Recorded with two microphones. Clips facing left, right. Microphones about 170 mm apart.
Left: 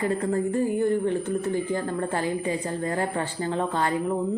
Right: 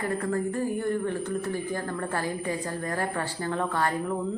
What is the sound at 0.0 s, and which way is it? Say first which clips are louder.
A woman's voice: left 3 dB; 20° left (ahead or behind).